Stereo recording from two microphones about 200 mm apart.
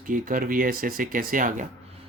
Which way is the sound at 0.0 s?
45° right (ahead or behind).